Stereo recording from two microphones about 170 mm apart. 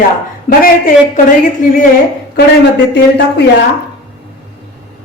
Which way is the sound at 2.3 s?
90° left.